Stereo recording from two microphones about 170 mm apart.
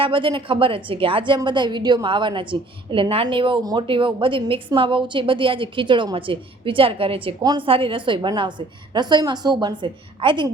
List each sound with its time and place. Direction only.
0.0 s a woman's voice: 30° right (ahead or behind)